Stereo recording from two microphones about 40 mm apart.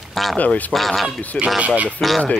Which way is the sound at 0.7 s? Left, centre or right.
Centre.